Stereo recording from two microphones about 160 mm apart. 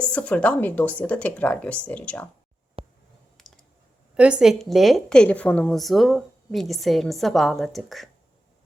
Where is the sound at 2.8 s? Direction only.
35° right (ahead or behind).